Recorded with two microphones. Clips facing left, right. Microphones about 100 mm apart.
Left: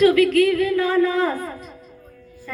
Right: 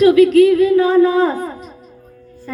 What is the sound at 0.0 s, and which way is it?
A man's voice, 20° right (ahead or behind).